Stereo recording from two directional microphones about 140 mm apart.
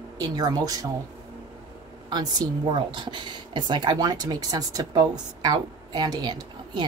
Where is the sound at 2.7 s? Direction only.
35° right (ahead or behind).